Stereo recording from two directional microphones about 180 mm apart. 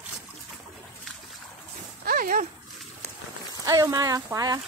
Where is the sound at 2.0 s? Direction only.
50° right (ahead or behind).